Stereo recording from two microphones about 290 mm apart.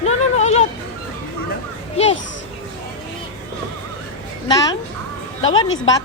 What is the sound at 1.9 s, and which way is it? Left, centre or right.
Speech, left.